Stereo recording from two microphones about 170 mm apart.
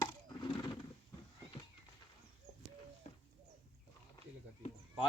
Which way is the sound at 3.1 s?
40° left (ahead or behind).